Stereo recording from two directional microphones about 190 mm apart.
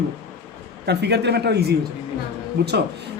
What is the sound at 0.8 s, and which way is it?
Speech, 60° right (ahead or behind).